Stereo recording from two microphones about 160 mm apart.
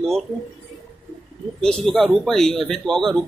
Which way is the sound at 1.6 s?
5° left (ahead or behind).